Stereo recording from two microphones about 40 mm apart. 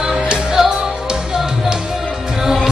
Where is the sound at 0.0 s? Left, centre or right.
Right.